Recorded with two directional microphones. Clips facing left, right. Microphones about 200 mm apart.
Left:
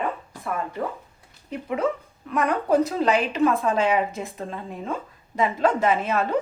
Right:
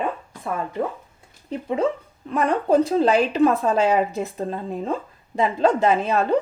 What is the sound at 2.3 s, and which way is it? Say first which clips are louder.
A woman's voice: right 2 dB; 30° right (ahead or behind).